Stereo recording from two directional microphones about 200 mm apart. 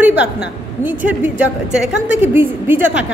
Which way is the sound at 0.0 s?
10° right (ahead or behind).